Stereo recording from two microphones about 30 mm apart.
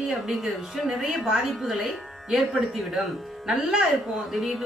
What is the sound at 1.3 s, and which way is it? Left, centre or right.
Speech, centre.